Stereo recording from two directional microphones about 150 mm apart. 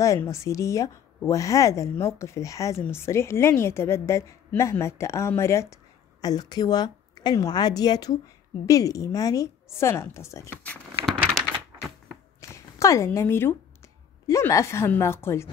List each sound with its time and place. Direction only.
0.0 s speech: 20° left (ahead or behind)
12.4 s a sound: 20° left (ahead or behind)
14.2 s a woman's voice: 20° left (ahead or behind)